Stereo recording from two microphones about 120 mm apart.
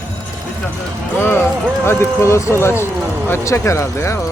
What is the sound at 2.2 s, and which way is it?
Speech, 25° left (ahead or behind).